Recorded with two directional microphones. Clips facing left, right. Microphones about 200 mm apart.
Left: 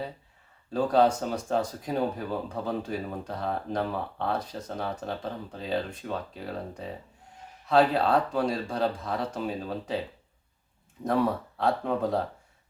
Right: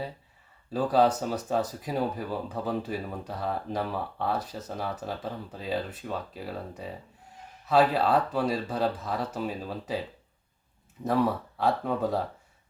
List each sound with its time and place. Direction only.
0.7 s speech: 5° right (ahead or behind)
11.0 s speech: centre (ahead or behind)